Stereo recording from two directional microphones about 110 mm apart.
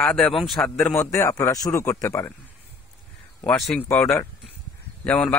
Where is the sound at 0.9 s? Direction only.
25° left (ahead or behind).